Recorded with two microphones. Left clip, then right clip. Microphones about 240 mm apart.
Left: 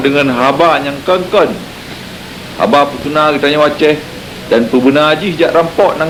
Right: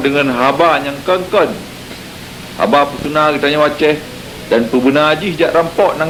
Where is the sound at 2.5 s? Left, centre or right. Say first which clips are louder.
Left 2 dB; right.